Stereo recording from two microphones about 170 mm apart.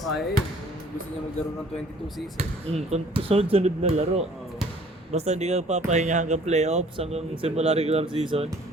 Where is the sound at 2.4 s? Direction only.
40° right (ahead or behind).